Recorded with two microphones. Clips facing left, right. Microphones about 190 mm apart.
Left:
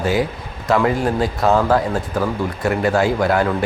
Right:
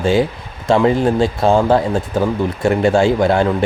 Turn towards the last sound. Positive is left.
turn(degrees=-25)  # may be behind; listen again after turning